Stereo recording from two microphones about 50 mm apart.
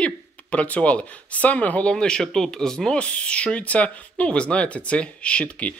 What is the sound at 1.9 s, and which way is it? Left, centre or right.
Speech, centre.